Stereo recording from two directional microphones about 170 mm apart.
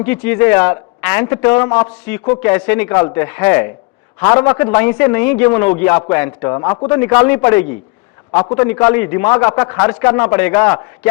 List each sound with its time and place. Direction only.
0.0 s a man's voice: 10° left (ahead or behind)